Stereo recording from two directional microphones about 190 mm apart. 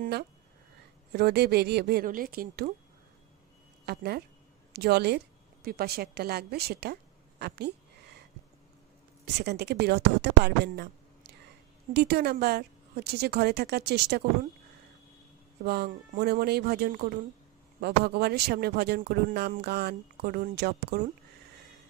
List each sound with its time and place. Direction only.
1.1 s a woman's voice: 60° right (ahead or behind)
3.8 s a woman's voice: 55° right (ahead or behind)
9.2 s a woman's voice: 60° right (ahead or behind)
15.6 s a woman's voice: 55° right (ahead or behind)